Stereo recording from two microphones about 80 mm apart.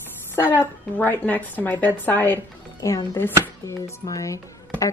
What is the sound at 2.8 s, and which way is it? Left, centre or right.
A woman's voice, left.